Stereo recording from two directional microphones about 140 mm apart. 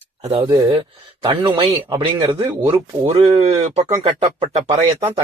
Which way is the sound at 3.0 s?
35° right (ahead or behind).